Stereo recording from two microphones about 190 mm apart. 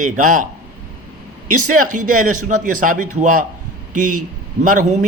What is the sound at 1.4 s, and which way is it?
Speech, 45° right (ahead or behind).